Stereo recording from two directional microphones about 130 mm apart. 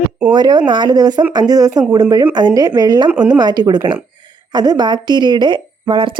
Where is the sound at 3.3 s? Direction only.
30° right (ahead or behind).